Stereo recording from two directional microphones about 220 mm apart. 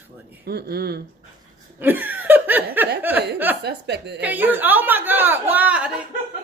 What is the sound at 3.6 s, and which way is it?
Speech, 50° right (ahead or behind).